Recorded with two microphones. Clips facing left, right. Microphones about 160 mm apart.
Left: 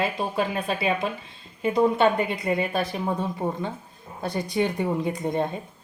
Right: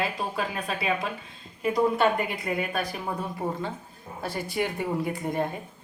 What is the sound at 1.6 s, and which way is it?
A woman's voice, 25° left (ahead or behind).